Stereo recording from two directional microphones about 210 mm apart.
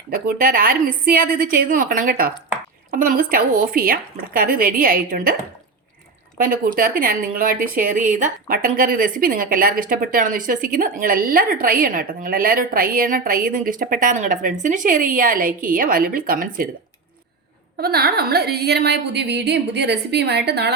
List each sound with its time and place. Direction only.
0.1 s speech: 40° right (ahead or behind)
17.7 s speech: 45° right (ahead or behind)